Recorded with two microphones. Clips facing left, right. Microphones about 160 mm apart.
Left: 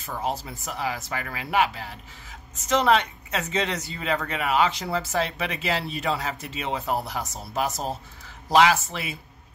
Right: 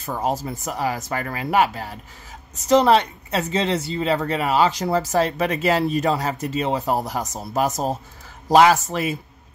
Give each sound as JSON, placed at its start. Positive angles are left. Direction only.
{"t": 0.0, "sound": "speech", "side_deg": -45}